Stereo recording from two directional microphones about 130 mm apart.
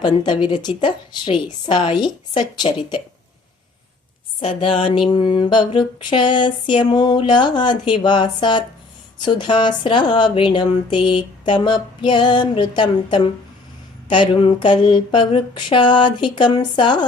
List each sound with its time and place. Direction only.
0.0 s speech: 35° left (ahead or behind)
4.4 s speech: 45° left (ahead or behind)